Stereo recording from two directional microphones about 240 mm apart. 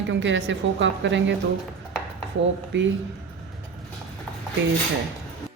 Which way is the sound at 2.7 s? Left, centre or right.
Right.